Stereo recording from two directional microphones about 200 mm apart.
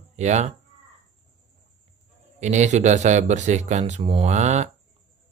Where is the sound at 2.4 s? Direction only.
35° right (ahead or behind).